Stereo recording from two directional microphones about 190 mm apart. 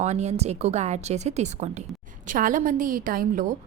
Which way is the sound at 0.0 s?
35° right (ahead or behind).